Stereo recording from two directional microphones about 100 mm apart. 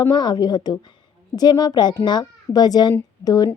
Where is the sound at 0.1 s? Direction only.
45° left (ahead or behind).